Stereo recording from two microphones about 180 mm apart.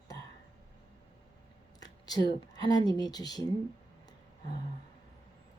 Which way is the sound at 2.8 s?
20° left (ahead or behind).